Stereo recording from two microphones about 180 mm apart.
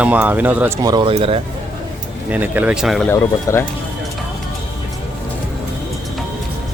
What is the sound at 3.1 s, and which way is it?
Speech, 15° left (ahead or behind).